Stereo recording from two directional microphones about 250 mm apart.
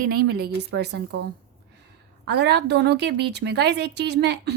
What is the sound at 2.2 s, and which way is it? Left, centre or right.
A woman's voice, right.